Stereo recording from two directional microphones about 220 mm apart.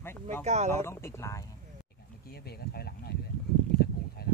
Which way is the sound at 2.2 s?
45° left (ahead or behind).